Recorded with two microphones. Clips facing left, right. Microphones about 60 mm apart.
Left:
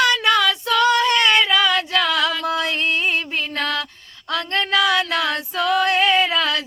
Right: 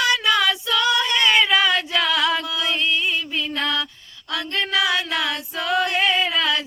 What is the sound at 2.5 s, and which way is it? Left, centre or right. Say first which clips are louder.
Music: left 2 dB; left.